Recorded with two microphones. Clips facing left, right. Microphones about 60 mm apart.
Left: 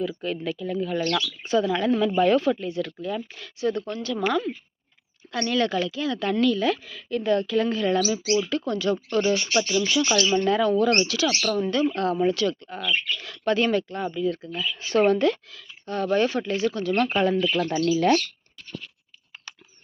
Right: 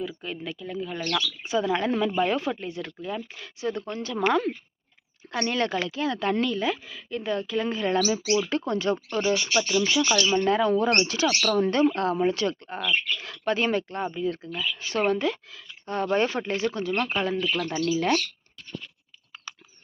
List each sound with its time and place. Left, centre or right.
0.3 s speech: centre
1.4 s speech: centre
1.6 s a woman's voice: right
5.3 s a woman's voice: right
7.9 s speech: right
9.0 s speech: centre
9.8 s a woman's voice: right
11.0 s speech: right
12.0 s a woman's voice: right
14.8 s speech: centre
15.5 s a woman's voice: right
17.0 s speech: centre